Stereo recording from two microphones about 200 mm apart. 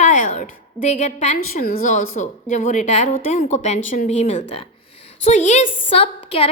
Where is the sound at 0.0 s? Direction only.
40° left (ahead or behind).